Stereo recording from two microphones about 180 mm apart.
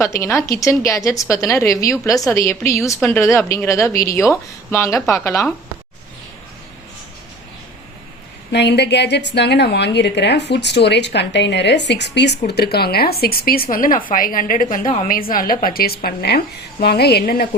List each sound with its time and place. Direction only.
0.0 s a woman's voice: 15° left (ahead or behind)
8.5 s a woman's voice: 70° left (ahead or behind)